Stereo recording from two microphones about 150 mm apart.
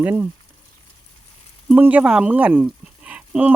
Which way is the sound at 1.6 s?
10° right (ahead or behind).